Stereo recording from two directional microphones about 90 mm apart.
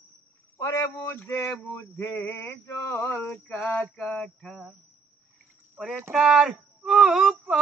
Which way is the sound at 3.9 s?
15° left (ahead or behind).